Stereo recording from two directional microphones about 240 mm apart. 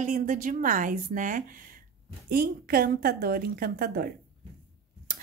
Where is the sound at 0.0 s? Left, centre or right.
Right.